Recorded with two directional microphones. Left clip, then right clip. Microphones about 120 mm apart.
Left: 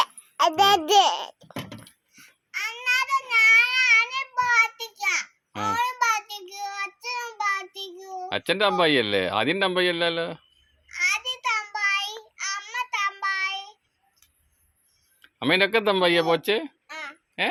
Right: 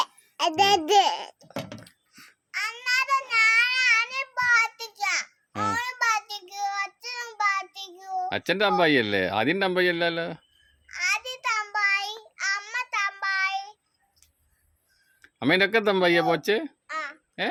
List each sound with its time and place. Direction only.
1.8 s child singing: 30° right (ahead or behind)
10.9 s child singing: 30° right (ahead or behind)
15.2 s speech: 45° right (ahead or behind); by 17.5 s 25° right (ahead or behind)